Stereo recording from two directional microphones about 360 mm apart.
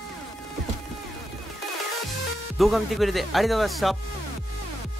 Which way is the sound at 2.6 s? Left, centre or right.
Centre.